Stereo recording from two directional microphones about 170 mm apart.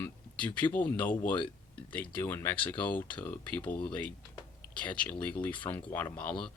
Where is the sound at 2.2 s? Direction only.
15° left (ahead or behind).